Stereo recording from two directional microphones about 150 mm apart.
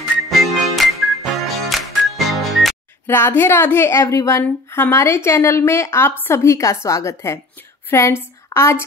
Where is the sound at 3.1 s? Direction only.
15° left (ahead or behind).